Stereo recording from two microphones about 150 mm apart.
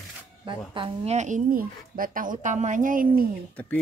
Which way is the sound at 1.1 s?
55° right (ahead or behind).